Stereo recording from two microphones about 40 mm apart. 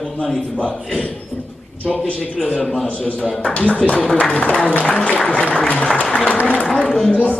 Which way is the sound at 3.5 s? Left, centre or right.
Left.